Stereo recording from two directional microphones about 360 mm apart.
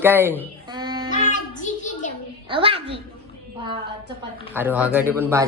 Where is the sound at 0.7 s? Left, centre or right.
Centre.